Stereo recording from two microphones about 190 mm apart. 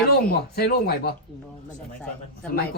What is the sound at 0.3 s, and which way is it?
Speech, 55° left (ahead or behind).